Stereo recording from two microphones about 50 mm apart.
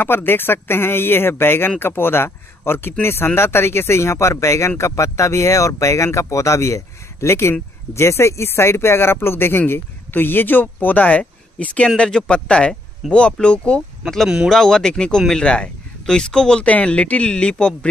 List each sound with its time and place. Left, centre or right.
0.0 s speech: left; by 13.8 s centre
14.5 s speech: centre